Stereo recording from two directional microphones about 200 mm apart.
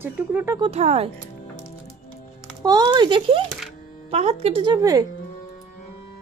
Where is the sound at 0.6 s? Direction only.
30° right (ahead or behind).